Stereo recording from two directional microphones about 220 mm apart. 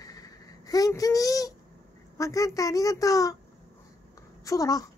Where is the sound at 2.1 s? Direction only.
15° left (ahead or behind).